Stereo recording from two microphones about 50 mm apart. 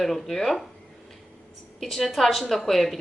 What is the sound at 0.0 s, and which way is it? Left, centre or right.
Speech, centre.